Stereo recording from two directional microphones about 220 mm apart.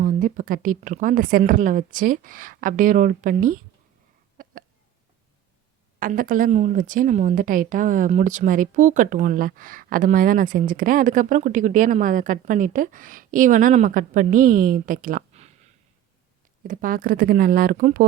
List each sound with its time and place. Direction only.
0.0 s a woman's voice: 40° right (ahead or behind)
4.4 s cough: 40° right (ahead or behind)
6.0 s a woman's voice: 40° right (ahead or behind)